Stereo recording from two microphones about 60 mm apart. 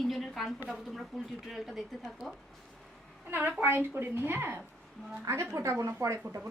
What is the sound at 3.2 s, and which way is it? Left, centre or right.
A woman's voice, right.